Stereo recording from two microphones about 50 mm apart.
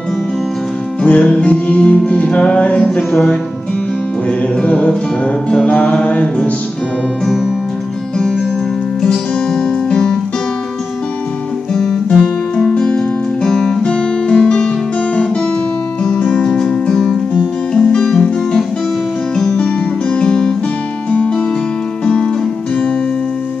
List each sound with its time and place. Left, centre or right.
1.0 s music: left
4.6 s music: centre
9.0 s guitar: centre
11.7 s guitar: centre
12.7 s music: centre
16.0 s music: centre
19.5 s music: centre